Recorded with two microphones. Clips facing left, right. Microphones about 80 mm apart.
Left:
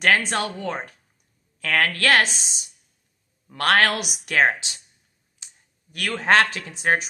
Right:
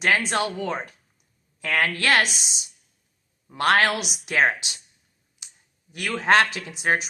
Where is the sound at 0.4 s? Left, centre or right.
Left.